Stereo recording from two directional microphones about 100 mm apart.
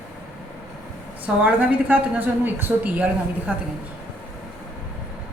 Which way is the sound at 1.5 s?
15° right (ahead or behind).